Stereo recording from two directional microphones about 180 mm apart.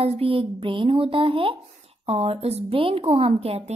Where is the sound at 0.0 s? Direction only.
30° right (ahead or behind).